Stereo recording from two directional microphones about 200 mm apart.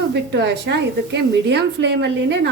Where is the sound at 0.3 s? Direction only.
60° right (ahead or behind).